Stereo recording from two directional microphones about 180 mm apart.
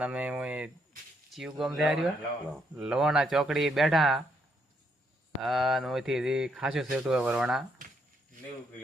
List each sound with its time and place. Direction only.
0.0 s speech: 5° right (ahead or behind)
5.4 s speech: centre (ahead or behind)